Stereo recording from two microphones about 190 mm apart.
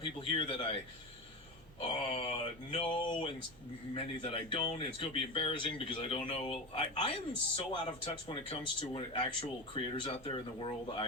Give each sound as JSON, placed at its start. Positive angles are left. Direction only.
{"t": 0.0, "sound": "speech", "side_deg": 25}
{"t": 2.0, "sound": "speech", "side_deg": 30}